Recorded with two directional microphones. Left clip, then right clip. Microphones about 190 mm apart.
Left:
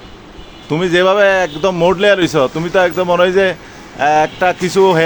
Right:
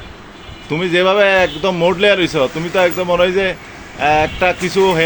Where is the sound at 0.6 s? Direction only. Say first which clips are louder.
Left 2 dB; 15° left (ahead or behind).